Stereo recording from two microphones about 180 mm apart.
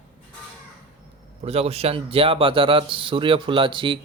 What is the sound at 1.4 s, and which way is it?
A man's voice, 35° right (ahead or behind).